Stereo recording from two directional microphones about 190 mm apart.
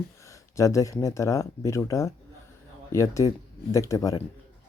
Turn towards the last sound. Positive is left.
turn(degrees=20)  # may be behind; listen again after turning